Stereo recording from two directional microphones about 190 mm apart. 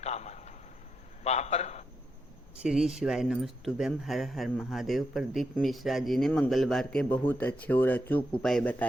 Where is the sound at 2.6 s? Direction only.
5° right (ahead or behind).